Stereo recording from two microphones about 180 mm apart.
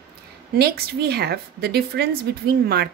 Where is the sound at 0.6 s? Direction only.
60° right (ahead or behind).